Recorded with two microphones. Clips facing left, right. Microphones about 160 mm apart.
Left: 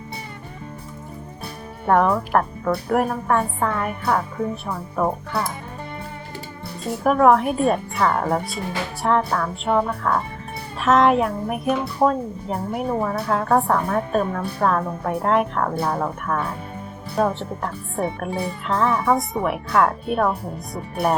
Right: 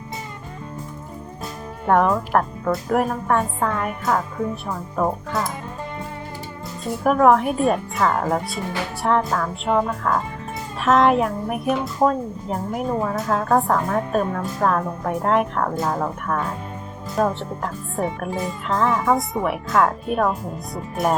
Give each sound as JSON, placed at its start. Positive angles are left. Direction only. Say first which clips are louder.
{"t": 1.9, "sound": "a woman's voice", "louder": "even", "side_deg": 5}
{"t": 7.0, "sound": "a woman's voice", "louder": "even", "side_deg": 0}